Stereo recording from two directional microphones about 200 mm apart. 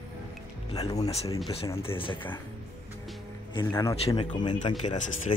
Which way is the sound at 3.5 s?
15° left (ahead or behind).